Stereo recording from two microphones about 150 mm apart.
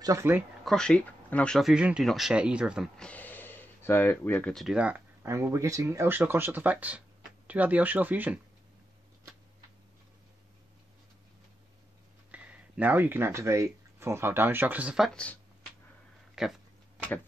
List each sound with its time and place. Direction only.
0.0 s speech: 20° right (ahead or behind)
0.7 s speech: 5° left (ahead or behind)
3.1 s speech: 10° left (ahead or behind); by 8.4 s 10° right (ahead or behind)
12.3 s speech: 10° right (ahead or behind)
15.0 s speech: 5° left (ahead or behind)
16.4 s speech: centre (ahead or behind)